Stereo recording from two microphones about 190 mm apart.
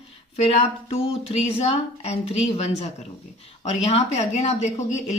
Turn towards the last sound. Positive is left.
turn(degrees=35)  # may be behind; listen again after turning